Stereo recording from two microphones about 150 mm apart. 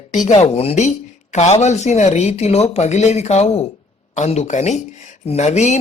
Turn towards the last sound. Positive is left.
turn(degrees=50)  # may be behind; listen again after turning